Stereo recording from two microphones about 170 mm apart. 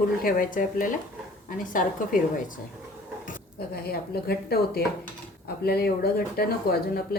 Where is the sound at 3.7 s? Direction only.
65° left (ahead or behind).